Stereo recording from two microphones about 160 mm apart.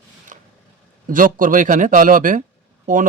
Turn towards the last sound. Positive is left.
turn(degrees=-55)  # may be behind; listen again after turning